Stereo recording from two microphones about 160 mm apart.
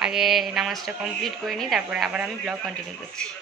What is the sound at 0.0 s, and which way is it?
Speech, 5° right (ahead or behind).